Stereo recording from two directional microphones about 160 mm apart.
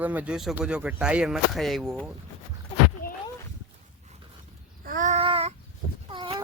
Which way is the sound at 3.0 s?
65° left (ahead or behind).